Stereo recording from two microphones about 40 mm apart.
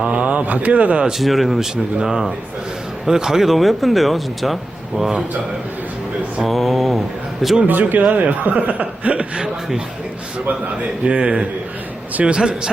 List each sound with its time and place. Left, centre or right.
0.0 s speech: right
1.2 s speech: centre
1.7 s speech: centre
6.5 s mantra: centre
7.7 s speech: right
9.4 s a sound: centre
11.0 s a man's voice: right